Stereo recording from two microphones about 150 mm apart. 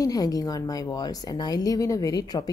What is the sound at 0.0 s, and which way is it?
A woman's voice, 25° left (ahead or behind).